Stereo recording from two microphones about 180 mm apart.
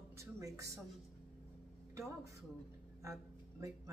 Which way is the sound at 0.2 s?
15° right (ahead or behind).